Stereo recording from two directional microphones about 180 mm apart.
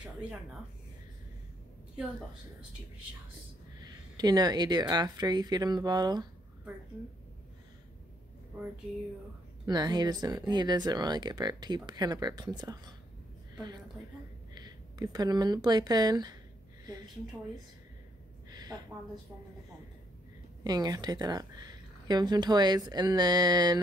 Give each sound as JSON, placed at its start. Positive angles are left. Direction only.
{"t": 0.0, "sound": "speech", "side_deg": -5}
{"t": 4.2, "sound": "speech", "side_deg": -20}
{"t": 8.5, "sound": "speech", "side_deg": -10}
{"t": 9.7, "sound": "speech", "side_deg": -25}
{"t": 14.5, "sound": "a woman's voice", "side_deg": -20}
{"t": 18.5, "sound": "a sound", "side_deg": -20}
{"t": 20.6, "sound": "speech", "side_deg": -20}